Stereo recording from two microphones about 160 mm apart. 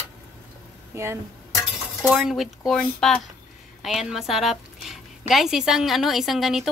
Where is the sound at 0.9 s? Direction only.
15° right (ahead or behind).